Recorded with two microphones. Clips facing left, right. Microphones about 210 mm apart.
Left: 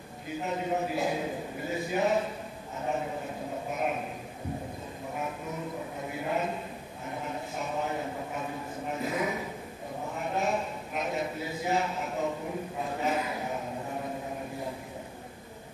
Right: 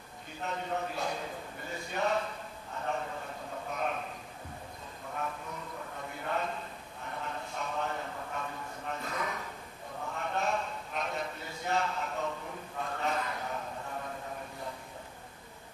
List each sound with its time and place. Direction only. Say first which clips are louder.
0.5 s a man's voice: left 5 dB; 15° left (ahead or behind)
6.2 s a man's voice: left 3 dB; 10° left (ahead or behind)
13.0 s a sound: left 4 dB; 5° left (ahead or behind)